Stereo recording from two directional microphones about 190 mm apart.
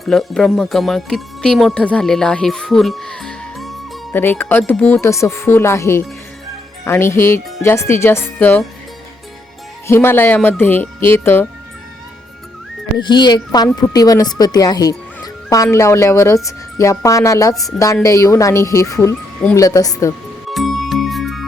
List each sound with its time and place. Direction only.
0.0 s speech: centre (ahead or behind)
9.8 s speech: 15° left (ahead or behind)
13.0 s speech: 25° left (ahead or behind)
20.5 s music: centre (ahead or behind)